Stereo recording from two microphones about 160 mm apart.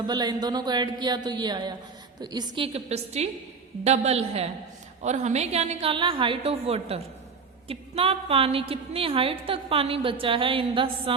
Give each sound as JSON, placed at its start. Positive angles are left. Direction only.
{"t": 0.0, "sound": "speech", "side_deg": -25}
{"t": 2.7, "sound": "a woman's voice", "side_deg": -40}